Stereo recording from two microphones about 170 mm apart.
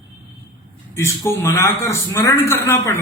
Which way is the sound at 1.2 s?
15° left (ahead or behind).